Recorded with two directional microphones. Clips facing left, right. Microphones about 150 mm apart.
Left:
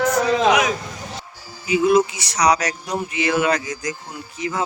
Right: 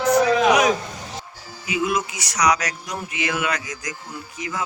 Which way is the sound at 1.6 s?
30° left (ahead or behind).